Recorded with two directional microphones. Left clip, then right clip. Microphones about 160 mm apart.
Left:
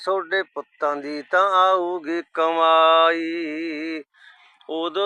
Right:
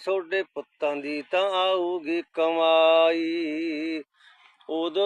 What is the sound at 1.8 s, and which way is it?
Speech, 20° left (ahead or behind).